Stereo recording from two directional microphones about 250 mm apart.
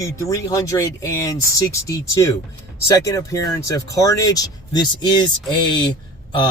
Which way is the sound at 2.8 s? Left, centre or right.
Centre.